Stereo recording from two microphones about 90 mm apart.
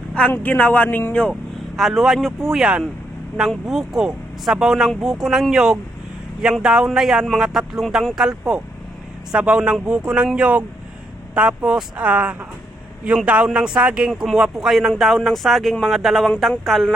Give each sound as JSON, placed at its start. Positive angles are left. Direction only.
{"t": 0.1, "sound": "speech", "side_deg": 15}
{"t": 1.3, "sound": "a man's voice", "side_deg": 0}